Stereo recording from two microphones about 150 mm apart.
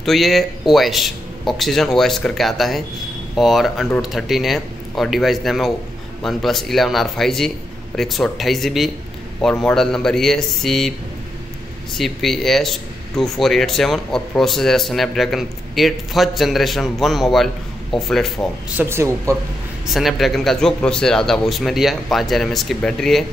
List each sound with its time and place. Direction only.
0.0 s speech: centre (ahead or behind)
12.0 s speech: centre (ahead or behind)
18.8 s speech: 15° right (ahead or behind)
19.9 s speech: centre (ahead or behind)